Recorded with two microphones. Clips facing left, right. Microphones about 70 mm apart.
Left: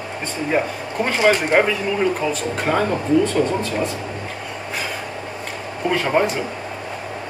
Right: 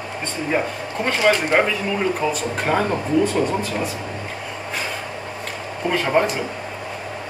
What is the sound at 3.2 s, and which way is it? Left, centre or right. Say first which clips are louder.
Speech: left 1 dB; centre.